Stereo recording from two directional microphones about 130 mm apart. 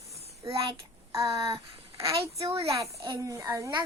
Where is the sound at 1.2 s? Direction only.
25° right (ahead or behind).